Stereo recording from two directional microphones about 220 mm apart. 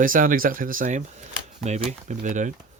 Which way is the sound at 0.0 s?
40° right (ahead or behind).